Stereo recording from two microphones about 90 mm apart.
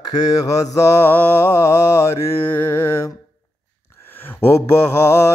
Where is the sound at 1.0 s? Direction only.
20° left (ahead or behind).